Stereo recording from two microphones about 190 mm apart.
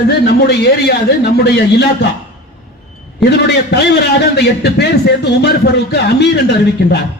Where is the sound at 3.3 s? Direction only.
60° left (ahead or behind).